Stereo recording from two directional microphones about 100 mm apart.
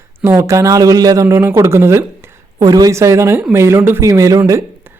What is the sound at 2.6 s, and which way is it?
A man's voice, 40° right (ahead or behind).